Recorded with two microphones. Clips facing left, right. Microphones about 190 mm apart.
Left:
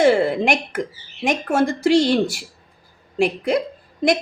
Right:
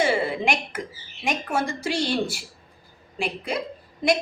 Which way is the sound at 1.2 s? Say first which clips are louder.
Left 7 dB; 45° left (ahead or behind).